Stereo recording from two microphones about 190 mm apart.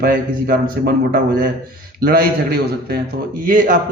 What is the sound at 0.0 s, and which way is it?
A man's voice, 50° right (ahead or behind).